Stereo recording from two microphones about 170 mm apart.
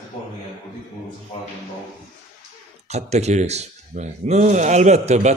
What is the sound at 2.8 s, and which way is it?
Speech, 40° right (ahead or behind).